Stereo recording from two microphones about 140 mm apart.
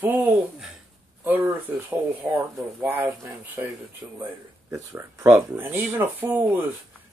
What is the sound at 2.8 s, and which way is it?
Speech, 15° right (ahead or behind).